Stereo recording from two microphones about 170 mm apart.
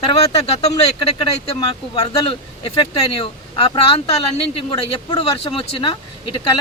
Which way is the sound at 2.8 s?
35° left (ahead or behind).